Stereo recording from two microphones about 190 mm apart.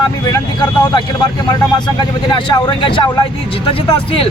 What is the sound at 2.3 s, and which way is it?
Speech, 20° left (ahead or behind).